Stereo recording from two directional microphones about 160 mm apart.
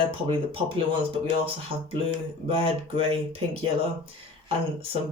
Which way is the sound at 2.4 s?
35° right (ahead or behind).